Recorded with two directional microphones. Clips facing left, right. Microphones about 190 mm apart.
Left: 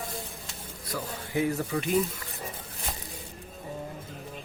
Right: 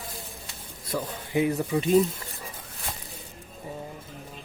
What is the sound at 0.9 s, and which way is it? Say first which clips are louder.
Speech: right 4 dB; 20° right (ahead or behind).